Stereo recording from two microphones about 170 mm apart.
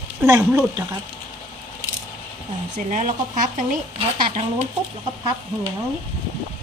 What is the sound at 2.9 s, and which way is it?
Speech, 50° right (ahead or behind).